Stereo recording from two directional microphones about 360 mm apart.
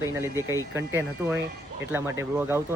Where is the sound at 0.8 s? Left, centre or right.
Centre.